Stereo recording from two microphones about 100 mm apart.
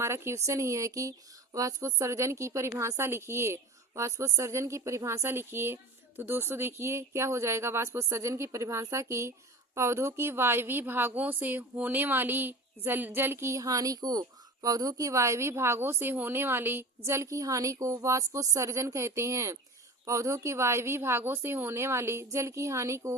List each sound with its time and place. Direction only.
0.0 s a woman's voice: 25° right (ahead or behind)